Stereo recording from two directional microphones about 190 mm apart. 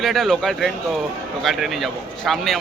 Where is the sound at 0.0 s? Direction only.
Centre (ahead or behind).